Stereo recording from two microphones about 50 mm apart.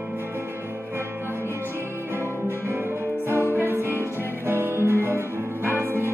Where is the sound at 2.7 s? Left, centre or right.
Right.